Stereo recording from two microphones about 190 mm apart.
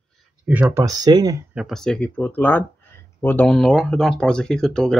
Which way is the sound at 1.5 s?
Centre (ahead or behind).